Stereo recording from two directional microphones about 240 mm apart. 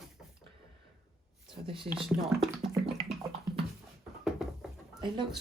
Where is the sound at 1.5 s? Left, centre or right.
Right.